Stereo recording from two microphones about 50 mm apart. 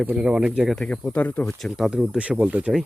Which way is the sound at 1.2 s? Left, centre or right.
Left.